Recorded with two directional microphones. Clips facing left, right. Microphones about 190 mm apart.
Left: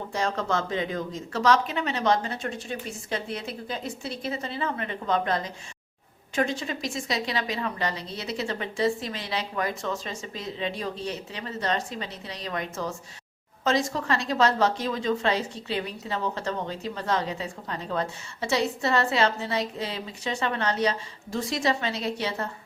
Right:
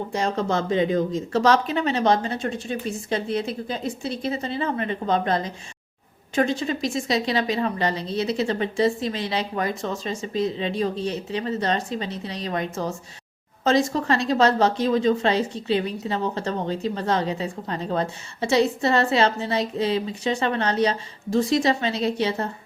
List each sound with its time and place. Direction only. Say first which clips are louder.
0.1 s speech: right 3 dB; 20° right (ahead or behind)